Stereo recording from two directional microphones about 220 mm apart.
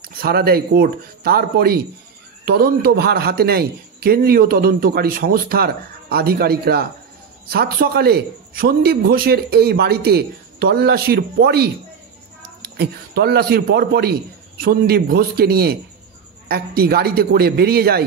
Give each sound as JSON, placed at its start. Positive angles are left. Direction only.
{"t": 0.0, "sound": "a man's voice", "side_deg": -45}
{"t": 12.7, "sound": "a man's voice", "side_deg": -45}